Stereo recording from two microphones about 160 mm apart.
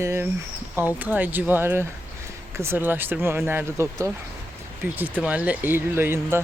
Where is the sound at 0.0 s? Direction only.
15° right (ahead or behind).